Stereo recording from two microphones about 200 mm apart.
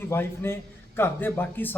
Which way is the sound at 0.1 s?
10° left (ahead or behind).